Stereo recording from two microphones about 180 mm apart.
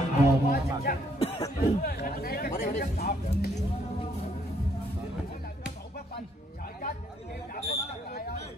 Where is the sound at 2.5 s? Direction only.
40° left (ahead or behind).